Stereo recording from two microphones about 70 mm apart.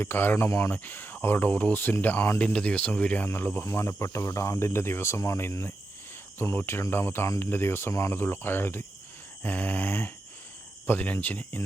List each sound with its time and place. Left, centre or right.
0.0 s speech: left
2.4 s speech: centre
3.2 s speech: left